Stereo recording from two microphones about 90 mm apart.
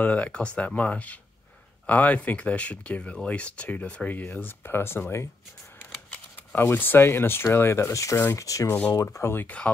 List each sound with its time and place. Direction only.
0.0 s speech: 15° left (ahead or behind)
6.3 s speech: 20° left (ahead or behind)